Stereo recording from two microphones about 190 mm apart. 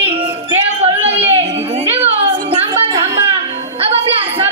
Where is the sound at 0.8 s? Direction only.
30° right (ahead or behind).